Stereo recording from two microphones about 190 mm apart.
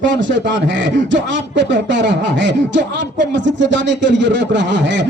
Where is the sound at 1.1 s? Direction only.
70° right (ahead or behind).